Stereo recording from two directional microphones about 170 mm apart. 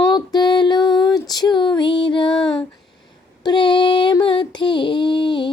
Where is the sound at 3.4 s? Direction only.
30° left (ahead or behind).